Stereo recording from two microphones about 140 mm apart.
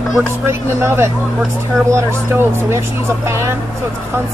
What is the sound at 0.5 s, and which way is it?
Speech, 20° right (ahead or behind).